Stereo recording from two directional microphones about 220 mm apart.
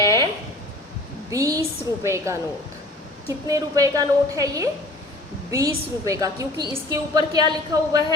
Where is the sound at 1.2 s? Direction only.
15° right (ahead or behind).